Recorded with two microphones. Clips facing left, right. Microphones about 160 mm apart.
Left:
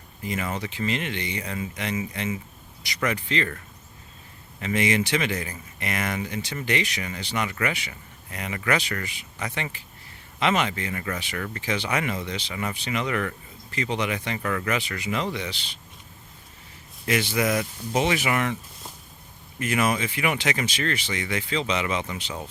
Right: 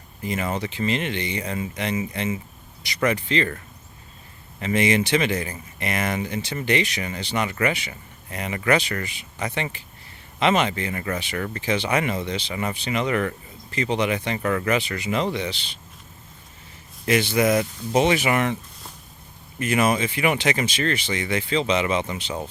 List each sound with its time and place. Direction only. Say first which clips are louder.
0.3 s speech: right 3 dB; 30° right (ahead or behind)
4.6 s speech: right 3 dB; 25° right (ahead or behind)
17.1 s speech: right 4 dB; 30° right (ahead or behind)
19.5 s speech: right 3 dB; 25° right (ahead or behind)